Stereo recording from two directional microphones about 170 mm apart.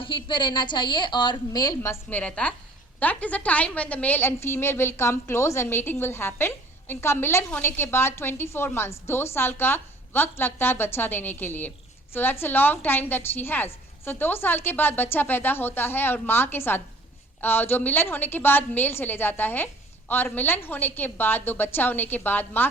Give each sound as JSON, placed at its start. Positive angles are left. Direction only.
{"t": 0.0, "sound": "a woman's voice", "side_deg": 30}